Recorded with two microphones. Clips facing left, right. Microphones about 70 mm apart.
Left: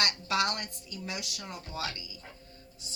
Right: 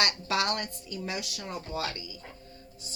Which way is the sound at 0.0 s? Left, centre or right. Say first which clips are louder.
Right 1 dB; right.